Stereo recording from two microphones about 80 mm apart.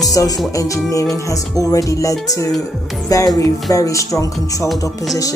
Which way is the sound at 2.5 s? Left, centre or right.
Centre.